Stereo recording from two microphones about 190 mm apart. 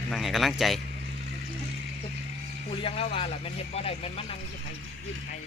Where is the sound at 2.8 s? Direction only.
30° left (ahead or behind).